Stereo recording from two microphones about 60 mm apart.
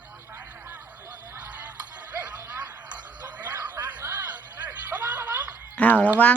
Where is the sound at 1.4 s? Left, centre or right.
Right.